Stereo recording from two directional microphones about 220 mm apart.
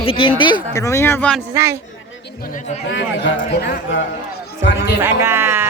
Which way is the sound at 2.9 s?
55° left (ahead or behind).